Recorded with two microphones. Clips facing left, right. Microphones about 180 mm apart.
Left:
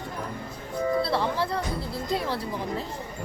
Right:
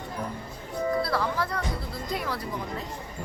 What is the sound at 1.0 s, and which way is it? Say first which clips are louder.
Music: left 2 dB; 25° left (ahead or behind).